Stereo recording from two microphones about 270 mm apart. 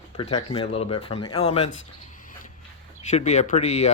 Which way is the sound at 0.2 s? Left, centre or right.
Centre.